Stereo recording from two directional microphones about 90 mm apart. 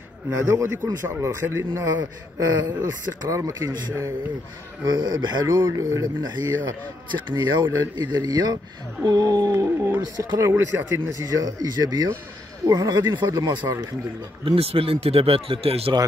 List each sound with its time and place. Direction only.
0.4 s a man's voice: 30° right (ahead or behind)
2.0 s speech: 50° right (ahead or behind)
3.3 s speech: 35° right (ahead or behind)
4.8 s speech: 50° right (ahead or behind)
5.8 s speech: 45° right (ahead or behind)
7.1 s speech: 60° right (ahead or behind); by 10.5 s 40° right (ahead or behind)
10.5 s a man's voice: 20° right (ahead or behind)
11.1 s speech: 40° right (ahead or behind)
14.4 s speech: 85° right